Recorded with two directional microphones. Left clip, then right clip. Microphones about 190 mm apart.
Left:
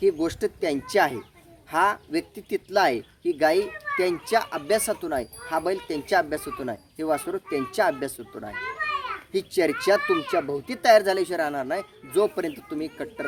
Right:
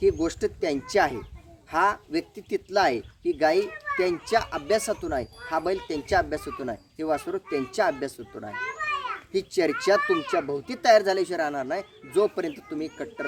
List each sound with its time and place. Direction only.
0.0 s speech: 20° left (ahead or behind)
8.5 s children playing: 15° right (ahead or behind)
9.3 s speech: 20° left (ahead or behind)